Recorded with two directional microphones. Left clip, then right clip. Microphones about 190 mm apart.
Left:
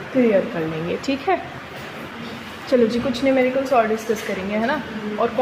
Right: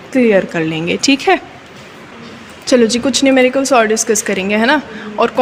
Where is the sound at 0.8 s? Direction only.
35° right (ahead or behind).